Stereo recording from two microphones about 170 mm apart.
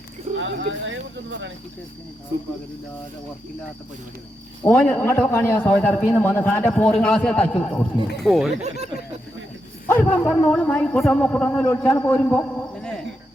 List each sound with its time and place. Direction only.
0.3 s speech: 90° right
4.6 s a man's voice: 10° left (ahead or behind)
8.6 s speech: 40° right (ahead or behind)
9.8 s a man's voice: 10° left (ahead or behind)